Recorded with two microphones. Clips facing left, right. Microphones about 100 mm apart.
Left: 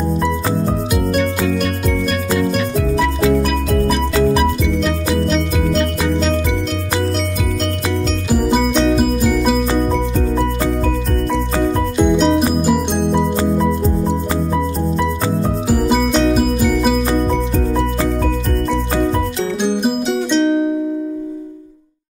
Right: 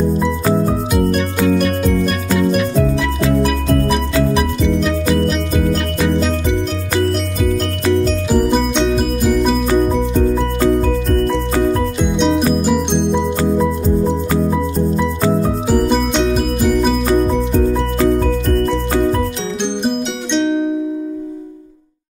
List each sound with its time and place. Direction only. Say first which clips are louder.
2.3 s music: right 4 dB; 5° right (ahead or behind)
8.4 s music: even; 5° left (ahead or behind)
12.0 s music: left 4 dB; 5° left (ahead or behind)
15.7 s music: even; 5° left (ahead or behind)
19.6 s music: left 1 dB; 5° left (ahead or behind)